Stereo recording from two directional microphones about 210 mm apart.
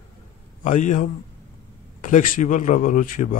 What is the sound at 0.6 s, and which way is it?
Speech, 35° left (ahead or behind).